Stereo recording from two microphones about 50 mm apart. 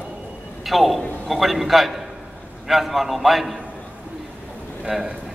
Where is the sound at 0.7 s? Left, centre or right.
Centre.